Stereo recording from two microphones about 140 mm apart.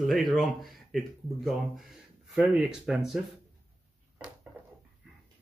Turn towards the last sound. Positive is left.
turn(degrees=-10)  # may be behind; listen again after turning